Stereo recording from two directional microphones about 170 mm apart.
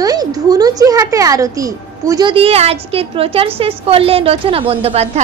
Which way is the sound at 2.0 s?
25° right (ahead or behind).